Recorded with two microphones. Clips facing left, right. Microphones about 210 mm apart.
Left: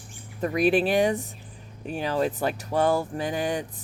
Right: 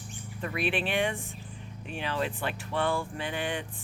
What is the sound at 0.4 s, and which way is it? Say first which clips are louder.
Speech: left 9 dB; 40° left (ahead or behind).